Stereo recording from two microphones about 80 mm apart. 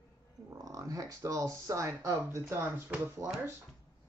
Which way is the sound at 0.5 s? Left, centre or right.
Right.